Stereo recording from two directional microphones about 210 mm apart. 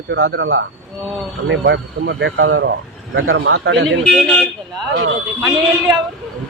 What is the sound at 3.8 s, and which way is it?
Speech, 5° left (ahead or behind).